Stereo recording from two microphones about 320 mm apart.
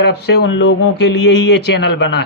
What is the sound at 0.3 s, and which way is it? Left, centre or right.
Speech, left.